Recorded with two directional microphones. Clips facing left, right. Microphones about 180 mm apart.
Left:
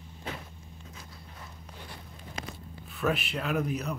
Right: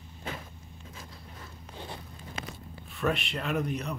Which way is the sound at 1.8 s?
25° right (ahead or behind).